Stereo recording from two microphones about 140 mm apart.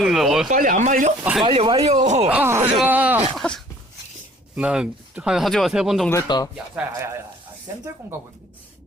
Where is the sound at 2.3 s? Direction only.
20° right (ahead or behind).